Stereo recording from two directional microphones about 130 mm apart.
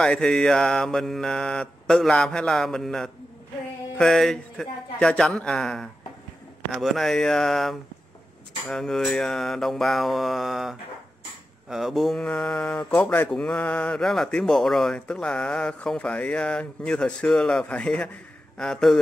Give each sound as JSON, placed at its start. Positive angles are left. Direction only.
{"t": 0.0, "sound": "mantra", "side_deg": 5}
{"t": 11.7, "sound": "speech", "side_deg": 0}
{"t": 18.6, "sound": "mantra", "side_deg": 5}